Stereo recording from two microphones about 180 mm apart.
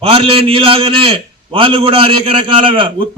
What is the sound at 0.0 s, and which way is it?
A man's voice, 30° right (ahead or behind).